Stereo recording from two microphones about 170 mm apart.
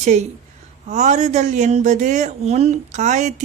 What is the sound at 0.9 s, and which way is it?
Speech, 45° right (ahead or behind).